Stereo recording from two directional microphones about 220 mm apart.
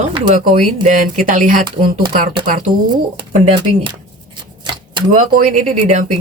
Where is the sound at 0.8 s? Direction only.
35° right (ahead or behind).